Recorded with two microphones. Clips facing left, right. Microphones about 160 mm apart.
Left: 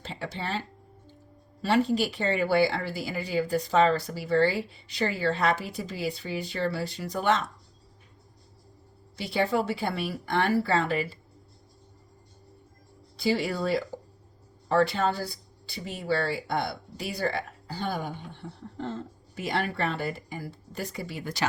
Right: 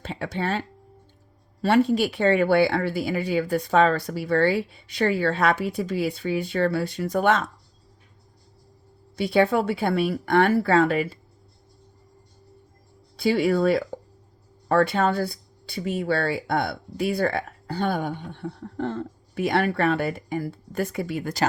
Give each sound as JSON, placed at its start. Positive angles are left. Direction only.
{"t": 0.0, "sound": "speech", "side_deg": -55}
{"t": 1.6, "sound": "speech", "side_deg": -55}
{"t": 9.2, "sound": "speech", "side_deg": -55}
{"t": 13.2, "sound": "speech", "side_deg": -55}